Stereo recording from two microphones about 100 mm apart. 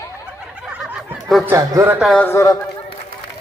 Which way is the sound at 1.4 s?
25° right (ahead or behind).